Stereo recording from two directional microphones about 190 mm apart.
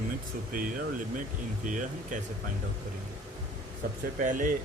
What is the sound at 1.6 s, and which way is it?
Speech, 45° right (ahead or behind).